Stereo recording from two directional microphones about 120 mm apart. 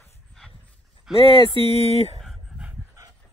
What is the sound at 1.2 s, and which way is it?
Speech, 50° left (ahead or behind).